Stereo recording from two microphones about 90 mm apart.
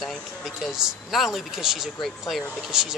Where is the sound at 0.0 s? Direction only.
Centre (ahead or behind).